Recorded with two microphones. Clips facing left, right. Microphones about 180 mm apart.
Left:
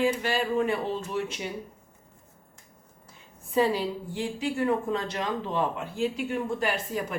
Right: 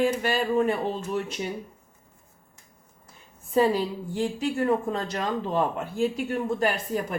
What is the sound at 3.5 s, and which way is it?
A woman's voice, 45° right (ahead or behind).